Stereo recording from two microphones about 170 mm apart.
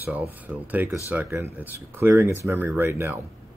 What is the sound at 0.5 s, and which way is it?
Speech, 5° right (ahead or behind).